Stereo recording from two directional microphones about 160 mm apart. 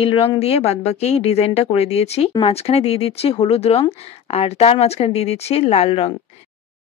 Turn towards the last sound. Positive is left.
turn(degrees=35)  # may be behind; listen again after turning